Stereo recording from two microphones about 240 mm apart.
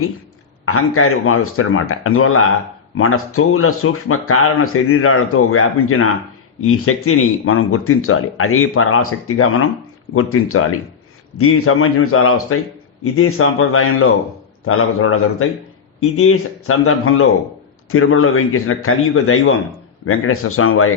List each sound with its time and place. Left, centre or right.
0.6 s speech: left